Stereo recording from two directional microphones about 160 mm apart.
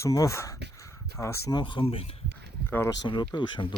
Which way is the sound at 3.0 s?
30° left (ahead or behind).